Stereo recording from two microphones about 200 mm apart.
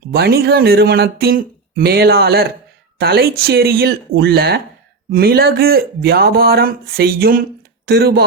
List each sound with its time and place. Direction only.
0.1 s speech: 50° right (ahead or behind)